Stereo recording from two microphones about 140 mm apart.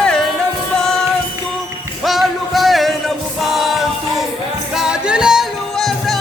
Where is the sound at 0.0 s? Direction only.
5° left (ahead or behind).